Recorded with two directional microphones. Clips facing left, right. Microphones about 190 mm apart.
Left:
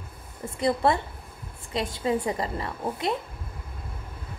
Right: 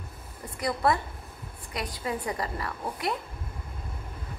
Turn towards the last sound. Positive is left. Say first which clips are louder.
# left 3 dB
turn(degrees=20)  # may be behind; listen again after turning